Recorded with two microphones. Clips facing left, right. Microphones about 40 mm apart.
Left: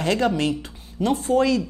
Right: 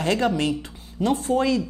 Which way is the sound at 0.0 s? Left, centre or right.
Left.